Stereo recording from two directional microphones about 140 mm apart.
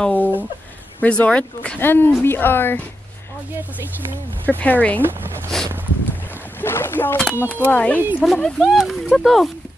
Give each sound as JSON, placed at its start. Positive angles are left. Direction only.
{"t": 0.0, "sound": "speech", "side_deg": 10}
{"t": 4.5, "sound": "speech", "side_deg": 10}
{"t": 5.0, "sound": "speech", "side_deg": -15}
{"t": 6.6, "sound": "speech", "side_deg": 15}